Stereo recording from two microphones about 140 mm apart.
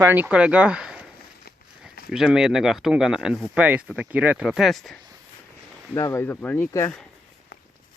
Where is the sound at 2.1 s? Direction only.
5° right (ahead or behind).